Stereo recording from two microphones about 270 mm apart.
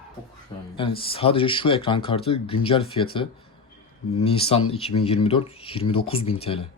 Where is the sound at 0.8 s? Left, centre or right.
Centre.